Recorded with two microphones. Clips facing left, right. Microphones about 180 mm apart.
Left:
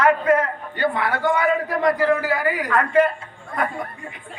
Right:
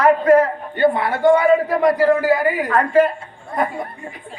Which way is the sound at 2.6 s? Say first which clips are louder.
Right 2 dB; 40° right (ahead or behind).